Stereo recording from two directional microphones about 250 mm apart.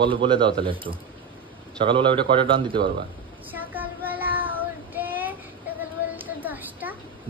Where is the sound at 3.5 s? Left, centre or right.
Centre.